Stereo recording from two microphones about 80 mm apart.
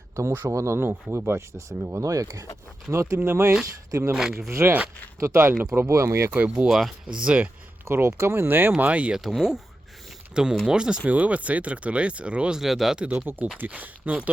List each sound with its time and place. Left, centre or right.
0.2 s speech: right
4.1 s speech: centre
5.2 s speech: right
6.4 s speech: centre
6.7 s speech: centre
7.1 s speech: centre
7.9 s speech: right
9.1 s speech: centre
13.1 s speech: right